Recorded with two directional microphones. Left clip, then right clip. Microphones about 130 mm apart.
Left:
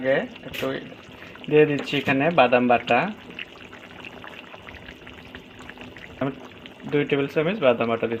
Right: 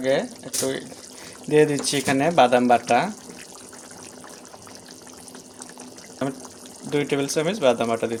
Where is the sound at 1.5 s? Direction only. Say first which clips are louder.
Even; 60° right (ahead or behind).